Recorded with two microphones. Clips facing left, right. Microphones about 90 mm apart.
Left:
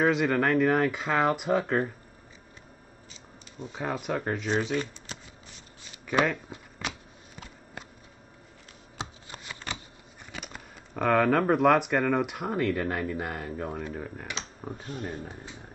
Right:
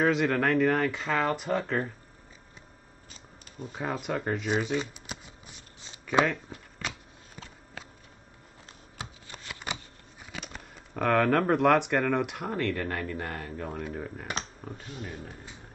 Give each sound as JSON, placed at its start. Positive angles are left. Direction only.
{"t": 0.0, "sound": "speech", "side_deg": 0}
{"t": 3.5, "sound": "speech", "side_deg": 0}
{"t": 8.9, "sound": "shuffling cards", "side_deg": 15}
{"t": 10.3, "sound": "speech", "side_deg": 5}
{"t": 14.9, "sound": "speech", "side_deg": 45}